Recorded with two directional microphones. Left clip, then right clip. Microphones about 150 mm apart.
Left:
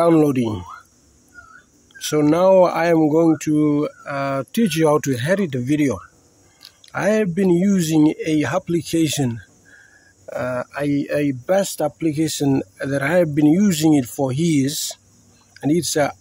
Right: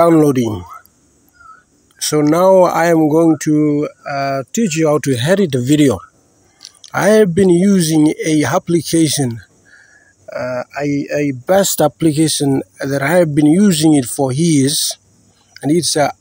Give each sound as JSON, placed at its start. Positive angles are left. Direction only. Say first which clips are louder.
{"t": 0.0, "sound": "speech", "louder": "right 5 dB", "side_deg": -20}
{"t": 2.0, "sound": "speech", "louder": "right 4 dB", "side_deg": -20}
{"t": 11.6, "sound": "speech", "louder": "right 8 dB", "side_deg": -45}
{"t": 12.1, "sound": "speech", "louder": "right 7 dB", "side_deg": -30}
{"t": 12.4, "sound": "speech", "louder": "right 4 dB", "side_deg": -15}